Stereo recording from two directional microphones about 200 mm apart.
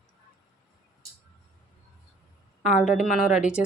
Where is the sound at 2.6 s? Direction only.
5° right (ahead or behind).